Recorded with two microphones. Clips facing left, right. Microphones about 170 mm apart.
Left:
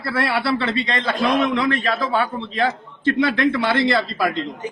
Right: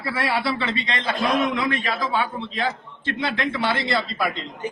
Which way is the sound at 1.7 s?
45° left (ahead or behind).